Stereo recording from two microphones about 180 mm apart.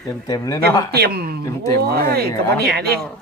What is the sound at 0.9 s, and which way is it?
Speech, 60° right (ahead or behind).